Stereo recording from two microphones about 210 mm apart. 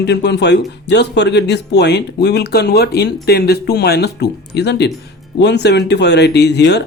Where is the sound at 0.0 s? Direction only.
55° left (ahead or behind).